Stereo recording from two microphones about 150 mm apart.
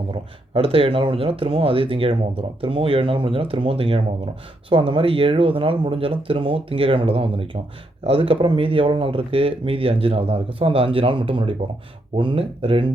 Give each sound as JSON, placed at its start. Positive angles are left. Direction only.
{"t": 0.1, "sound": "speech", "side_deg": -40}